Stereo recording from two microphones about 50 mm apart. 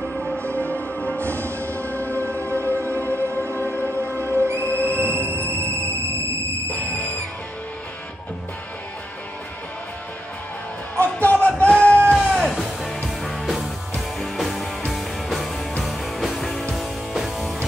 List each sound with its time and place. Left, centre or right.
0.1 s music: left
1.6 s music: right
1.9 s music: left
4.2 s music: right
6.7 s music: left
11.1 s music: left
12.1 s music: centre